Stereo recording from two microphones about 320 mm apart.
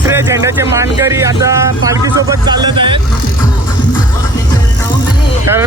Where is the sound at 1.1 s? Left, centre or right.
Centre.